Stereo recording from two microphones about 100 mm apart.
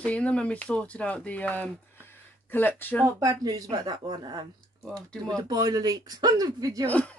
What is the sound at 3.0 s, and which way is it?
Speech, 35° right (ahead or behind).